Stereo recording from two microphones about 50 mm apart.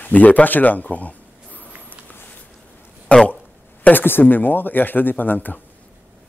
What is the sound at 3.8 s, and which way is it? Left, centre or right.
A man's voice, left.